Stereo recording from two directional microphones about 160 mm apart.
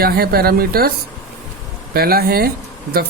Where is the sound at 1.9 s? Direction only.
75° right (ahead or behind).